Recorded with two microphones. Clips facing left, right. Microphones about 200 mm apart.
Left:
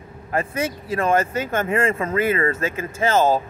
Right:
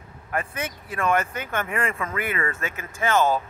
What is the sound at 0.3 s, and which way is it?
Speech, 30° left (ahead or behind).